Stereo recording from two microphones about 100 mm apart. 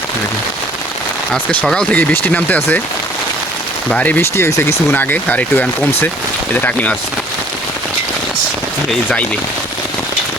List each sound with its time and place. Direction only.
1.3 s speech: 10° left (ahead or behind)
3.8 s speech: 15° left (ahead or behind)
4.4 s speech: 30° left (ahead or behind)